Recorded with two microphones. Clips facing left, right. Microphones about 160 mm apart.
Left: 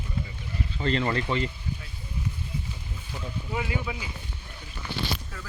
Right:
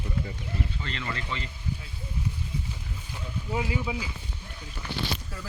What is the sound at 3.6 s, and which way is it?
Speech, 25° right (ahead or behind).